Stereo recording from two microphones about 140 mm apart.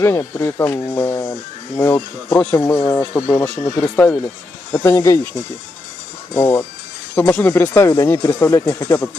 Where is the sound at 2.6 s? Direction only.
25° left (ahead or behind).